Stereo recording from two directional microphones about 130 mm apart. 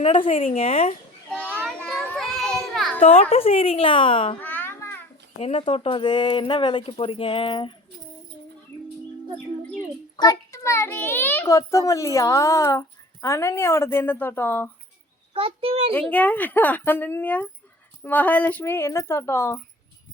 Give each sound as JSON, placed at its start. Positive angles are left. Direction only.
{"t": 0.0, "sound": "a woman's voice", "side_deg": 45}
{"t": 1.3, "sound": "children playing", "side_deg": 10}
{"t": 3.0, "sound": "a woman's voice", "side_deg": 50}
{"t": 4.4, "sound": "a sound", "side_deg": 15}
{"t": 5.4, "sound": "speech", "side_deg": 50}
{"t": 10.2, "sound": "a child's voice", "side_deg": 30}
{"t": 15.3, "sound": "a child's voice", "side_deg": -45}
{"t": 15.9, "sound": "speech", "side_deg": 10}